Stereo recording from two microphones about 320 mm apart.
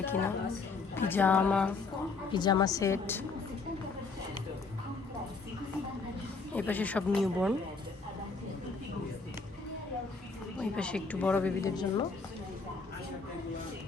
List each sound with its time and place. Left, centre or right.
0.0 s a woman's voice: centre
6.5 s a woman's voice: centre
10.6 s a woman's voice: centre